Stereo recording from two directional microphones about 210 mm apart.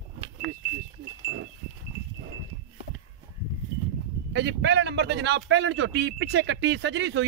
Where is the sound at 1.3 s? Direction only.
65° right (ahead or behind).